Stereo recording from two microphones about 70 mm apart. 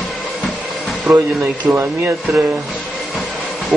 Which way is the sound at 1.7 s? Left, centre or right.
Right.